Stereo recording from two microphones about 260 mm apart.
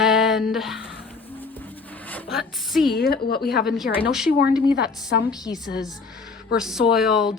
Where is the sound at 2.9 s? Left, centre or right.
Left.